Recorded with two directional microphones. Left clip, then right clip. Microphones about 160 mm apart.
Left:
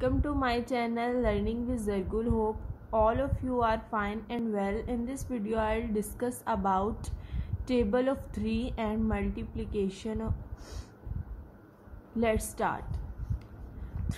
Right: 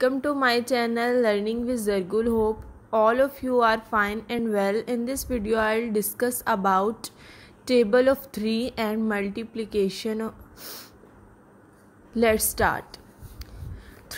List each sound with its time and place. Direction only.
0.0 s a woman's voice: 40° right (ahead or behind)
10.6 s a sound: 25° right (ahead or behind)
12.2 s a woman's voice: 40° right (ahead or behind)